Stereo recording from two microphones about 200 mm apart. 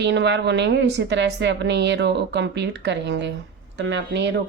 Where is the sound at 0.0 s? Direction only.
60° right (ahead or behind).